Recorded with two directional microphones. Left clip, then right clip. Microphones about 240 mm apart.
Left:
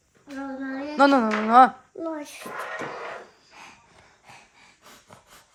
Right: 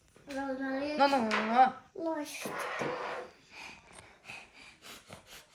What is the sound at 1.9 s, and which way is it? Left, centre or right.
Speech, left.